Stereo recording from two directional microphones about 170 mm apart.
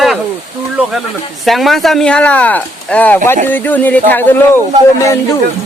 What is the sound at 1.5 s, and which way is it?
Speech, centre (ahead or behind).